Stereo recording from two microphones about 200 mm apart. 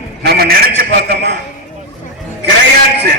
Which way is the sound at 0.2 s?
50° right (ahead or behind).